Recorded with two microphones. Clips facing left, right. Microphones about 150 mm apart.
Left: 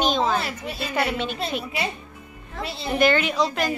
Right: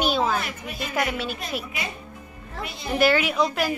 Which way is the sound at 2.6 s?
30° left (ahead or behind).